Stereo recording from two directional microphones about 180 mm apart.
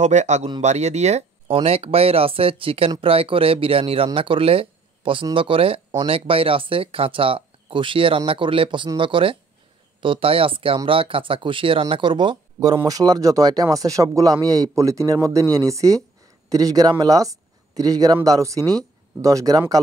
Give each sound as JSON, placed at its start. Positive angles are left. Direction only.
{"t": 0.0, "sound": "speech", "side_deg": -40}